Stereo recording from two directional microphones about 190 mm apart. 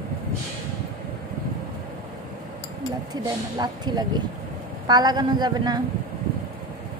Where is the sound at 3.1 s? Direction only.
20° right (ahead or behind).